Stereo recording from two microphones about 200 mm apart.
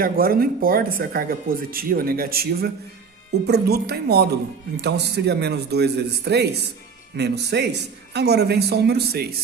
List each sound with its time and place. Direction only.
0.0 s a man's voice: 45° right (ahead or behind)